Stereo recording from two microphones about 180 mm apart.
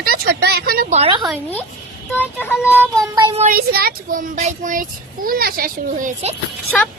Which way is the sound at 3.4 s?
55° right (ahead or behind).